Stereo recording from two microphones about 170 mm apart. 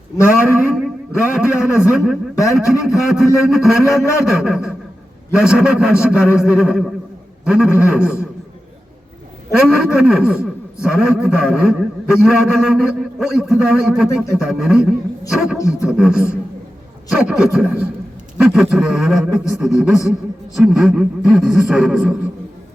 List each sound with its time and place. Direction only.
0.4 s a man's voice: 5° right (ahead or behind)
9.5 s a man's voice: 5° right (ahead or behind)
15.5 s wild animals: 20° left (ahead or behind)
15.9 s a man's voice: 5° right (ahead or behind)